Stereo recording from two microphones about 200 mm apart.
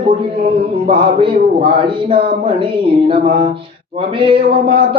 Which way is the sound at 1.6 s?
25° right (ahead or behind).